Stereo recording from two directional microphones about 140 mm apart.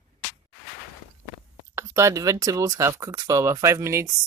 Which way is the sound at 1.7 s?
20° right (ahead or behind).